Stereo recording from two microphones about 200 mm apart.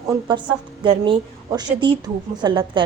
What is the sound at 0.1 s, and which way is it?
A woman's voice, 20° right (ahead or behind).